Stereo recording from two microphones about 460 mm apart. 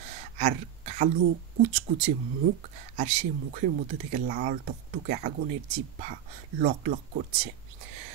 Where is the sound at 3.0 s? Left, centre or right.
Centre.